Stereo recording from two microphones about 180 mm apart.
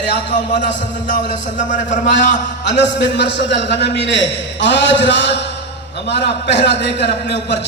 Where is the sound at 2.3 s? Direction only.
75° left (ahead or behind).